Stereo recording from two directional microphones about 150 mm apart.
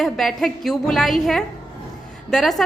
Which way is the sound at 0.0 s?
Centre (ahead or behind).